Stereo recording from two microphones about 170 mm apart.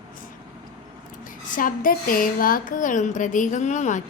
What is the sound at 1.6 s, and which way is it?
Speech, 55° left (ahead or behind).